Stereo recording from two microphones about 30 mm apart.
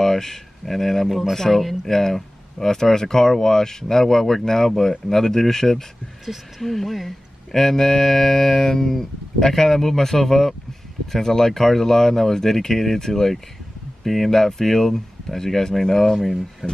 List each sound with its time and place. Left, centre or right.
0.0 s speech: centre
1.0 s speech: centre
1.3 s speech: centre
16.6 s speech: right